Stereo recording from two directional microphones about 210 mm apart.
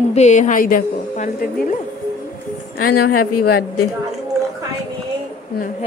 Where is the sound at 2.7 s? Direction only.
90° left.